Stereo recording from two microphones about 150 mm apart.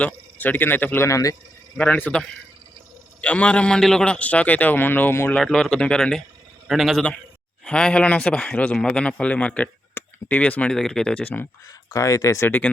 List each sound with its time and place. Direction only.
0.0 s speech: 10° left (ahead or behind)
1.8 s speech: 10° left (ahead or behind)
5.4 s speech: 5° left (ahead or behind)
11.9 s speech: 20° left (ahead or behind)